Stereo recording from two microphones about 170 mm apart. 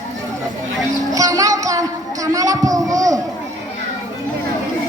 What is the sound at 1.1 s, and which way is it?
Music, 20° right (ahead or behind).